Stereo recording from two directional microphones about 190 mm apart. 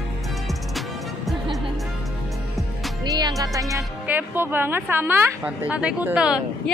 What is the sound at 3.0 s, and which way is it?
Speech, 20° right (ahead or behind).